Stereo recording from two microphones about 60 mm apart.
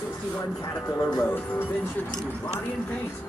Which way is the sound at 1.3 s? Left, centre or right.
Left.